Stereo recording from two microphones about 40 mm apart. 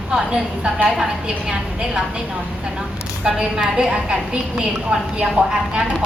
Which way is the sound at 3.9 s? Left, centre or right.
Right.